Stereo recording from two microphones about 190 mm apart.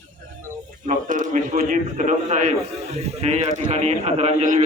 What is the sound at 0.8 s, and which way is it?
A man's voice, 40° right (ahead or behind).